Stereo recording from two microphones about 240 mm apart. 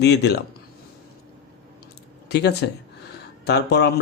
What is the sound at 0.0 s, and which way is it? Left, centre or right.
Speech, left.